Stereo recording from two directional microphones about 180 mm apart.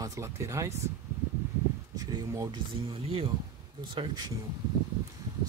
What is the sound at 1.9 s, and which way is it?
Speech, 20° right (ahead or behind).